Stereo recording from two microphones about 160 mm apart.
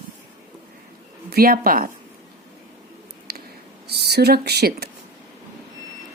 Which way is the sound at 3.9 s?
90° right.